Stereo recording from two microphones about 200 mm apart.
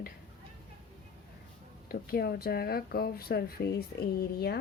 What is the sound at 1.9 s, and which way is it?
Speech, 50° left (ahead or behind).